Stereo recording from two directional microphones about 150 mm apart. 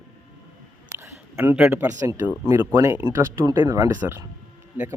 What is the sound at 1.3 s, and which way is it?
Speech, 10° right (ahead or behind).